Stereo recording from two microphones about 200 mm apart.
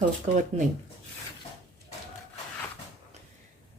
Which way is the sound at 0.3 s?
35° right (ahead or behind).